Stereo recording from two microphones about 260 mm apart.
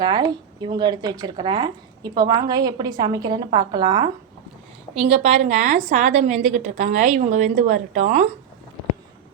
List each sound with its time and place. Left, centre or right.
0.0 s a woman's voice: centre